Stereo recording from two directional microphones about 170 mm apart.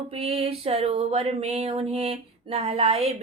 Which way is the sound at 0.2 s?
35° right (ahead or behind).